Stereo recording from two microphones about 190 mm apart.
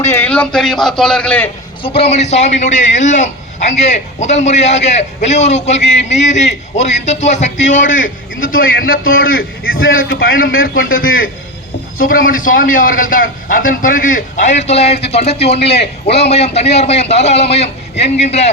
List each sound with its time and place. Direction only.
0.0 s a man's voice: 10° left (ahead or behind)
1.8 s a man's voice: 30° left (ahead or behind); by 9.3 s 50° left (ahead or behind)
9.3 s a man's voice: 90° left
9.9 s a man's voice: 50° left (ahead or behind); by 15.5 s 35° left (ahead or behind)
15.5 s a man's voice: 60° left (ahead or behind)
16.3 s a man's voice: 35° left (ahead or behind)